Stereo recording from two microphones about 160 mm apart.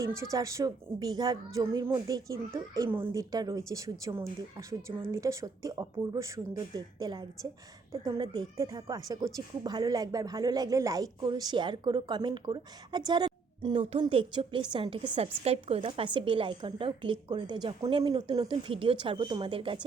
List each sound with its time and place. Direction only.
0.2 s a woman's voice: 20° right (ahead or behind)